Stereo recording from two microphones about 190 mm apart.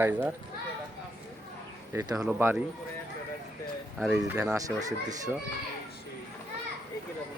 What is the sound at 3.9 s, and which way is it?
Speech, centre (ahead or behind).